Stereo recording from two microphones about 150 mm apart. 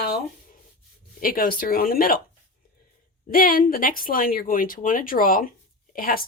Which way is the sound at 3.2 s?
70° left (ahead or behind).